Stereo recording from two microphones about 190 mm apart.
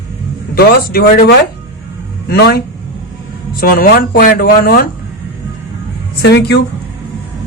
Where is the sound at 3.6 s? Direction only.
50° left (ahead or behind).